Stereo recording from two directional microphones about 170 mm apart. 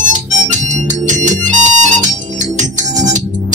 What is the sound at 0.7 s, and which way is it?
Music, 45° right (ahead or behind).